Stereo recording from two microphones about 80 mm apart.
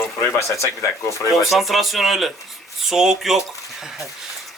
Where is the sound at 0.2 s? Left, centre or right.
Left.